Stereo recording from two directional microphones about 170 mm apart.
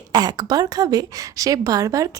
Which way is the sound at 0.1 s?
20° right (ahead or behind).